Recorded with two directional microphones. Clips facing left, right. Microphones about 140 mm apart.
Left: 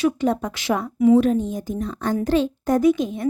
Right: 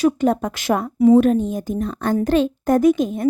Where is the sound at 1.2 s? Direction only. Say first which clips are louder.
Right 3 dB; 55° right (ahead or behind).